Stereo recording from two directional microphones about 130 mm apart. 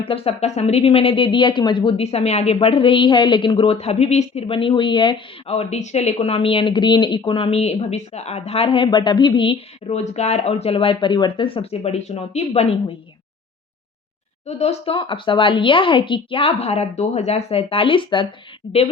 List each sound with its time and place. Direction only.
0.0 s speech: 45° left (ahead or behind)
5.5 s speech: 55° left (ahead or behind)
14.4 s speech: 55° left (ahead or behind)